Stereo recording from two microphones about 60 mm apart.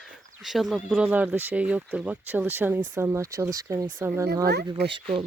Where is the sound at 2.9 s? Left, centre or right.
Right.